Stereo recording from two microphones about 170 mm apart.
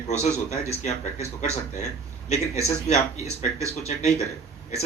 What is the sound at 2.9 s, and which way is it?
Speech, 40° left (ahead or behind).